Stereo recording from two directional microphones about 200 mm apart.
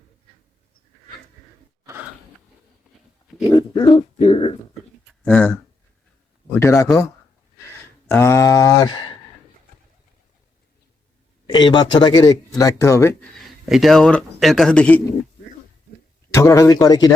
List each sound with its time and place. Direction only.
3.5 s speech: 25° left (ahead or behind)
5.2 s speech: 5° left (ahead or behind)
8.1 s speech: 15° left (ahead or behind)
11.4 s speech: 20° left (ahead or behind)
13.7 s speech: centre (ahead or behind)
16.3 s speech: 15° left (ahead or behind)